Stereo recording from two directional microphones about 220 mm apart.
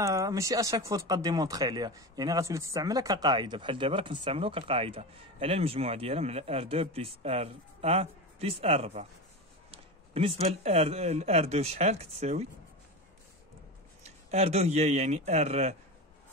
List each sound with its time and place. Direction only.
0.0 s speech: 15° right (ahead or behind); by 12.4 s 30° right (ahead or behind)
14.0 s speech: 30° right (ahead or behind)